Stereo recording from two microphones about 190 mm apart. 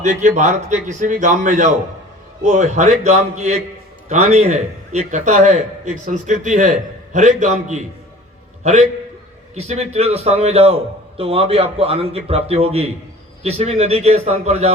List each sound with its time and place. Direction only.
0.0 s a man's voice: 40° right (ahead or behind)